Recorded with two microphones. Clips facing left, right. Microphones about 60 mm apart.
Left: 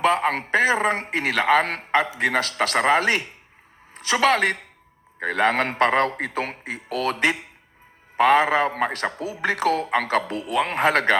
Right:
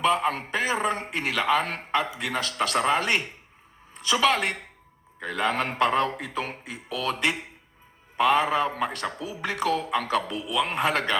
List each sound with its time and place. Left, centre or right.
0.0 s a man's voice: left
3.9 s a man's voice: left